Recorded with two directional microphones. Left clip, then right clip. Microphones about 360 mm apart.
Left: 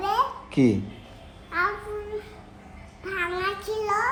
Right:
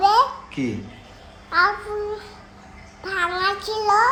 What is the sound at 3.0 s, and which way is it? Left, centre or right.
A child's voice, centre.